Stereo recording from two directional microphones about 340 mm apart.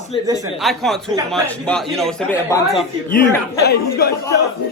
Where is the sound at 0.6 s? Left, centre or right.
Centre.